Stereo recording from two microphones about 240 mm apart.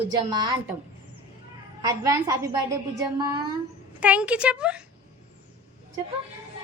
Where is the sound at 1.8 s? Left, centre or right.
Centre.